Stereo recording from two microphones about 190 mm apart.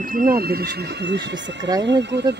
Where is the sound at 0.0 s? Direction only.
45° right (ahead or behind).